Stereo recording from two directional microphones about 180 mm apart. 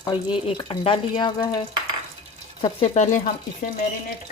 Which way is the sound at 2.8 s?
40° left (ahead or behind).